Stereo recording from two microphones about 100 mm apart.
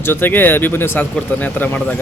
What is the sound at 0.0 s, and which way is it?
Speech, 20° left (ahead or behind).